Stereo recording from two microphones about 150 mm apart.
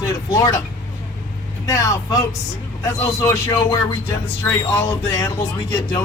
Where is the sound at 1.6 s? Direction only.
20° left (ahead or behind).